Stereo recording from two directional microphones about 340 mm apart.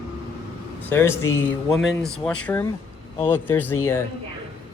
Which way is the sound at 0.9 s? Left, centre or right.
Centre.